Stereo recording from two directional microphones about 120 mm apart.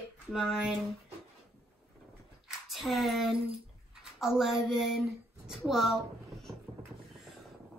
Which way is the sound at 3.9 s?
5° right (ahead or behind).